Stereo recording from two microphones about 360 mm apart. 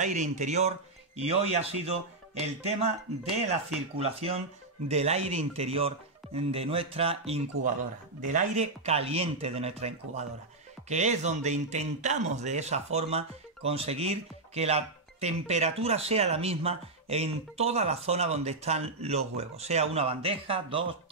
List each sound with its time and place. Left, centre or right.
0.0 s speech: centre
4.0 s speech: centre